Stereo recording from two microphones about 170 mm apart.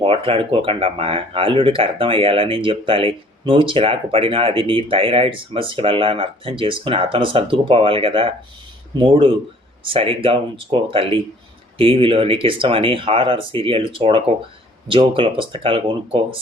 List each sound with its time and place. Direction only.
0.0 s speech: 30° right (ahead or behind)